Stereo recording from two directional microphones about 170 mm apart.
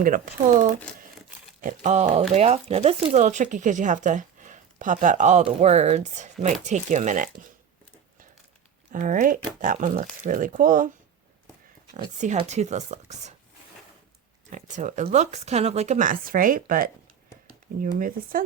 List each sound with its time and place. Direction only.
0.0 s speech: 50° right (ahead or behind)
8.9 s speech: 50° right (ahead or behind)
12.1 s speech: 45° right (ahead or behind)
14.5 s speech: 45° right (ahead or behind)